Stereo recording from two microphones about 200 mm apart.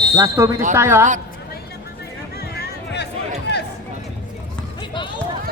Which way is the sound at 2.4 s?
55° left (ahead or behind).